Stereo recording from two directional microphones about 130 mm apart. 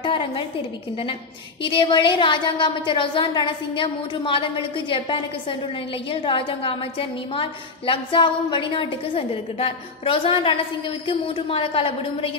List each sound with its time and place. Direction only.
0.0 s a woman's voice: 40° left (ahead or behind)
1.6 s a woman's voice: 40° left (ahead or behind)